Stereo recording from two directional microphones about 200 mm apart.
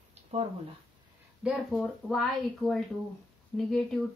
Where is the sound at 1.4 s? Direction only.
5° right (ahead or behind).